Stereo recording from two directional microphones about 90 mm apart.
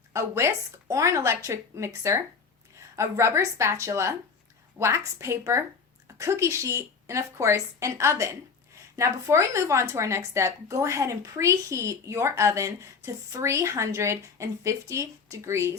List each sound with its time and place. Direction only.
0.1 s a woman's voice: 30° right (ahead or behind)